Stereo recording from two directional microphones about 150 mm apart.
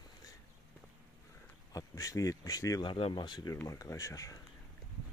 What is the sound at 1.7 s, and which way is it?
Speech, 25° left (ahead or behind).